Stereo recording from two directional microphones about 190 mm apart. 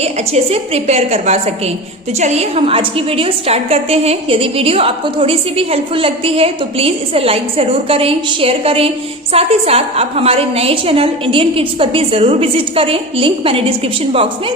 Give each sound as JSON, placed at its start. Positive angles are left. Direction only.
{"t": 0.0, "sound": "a woman's voice", "side_deg": -35}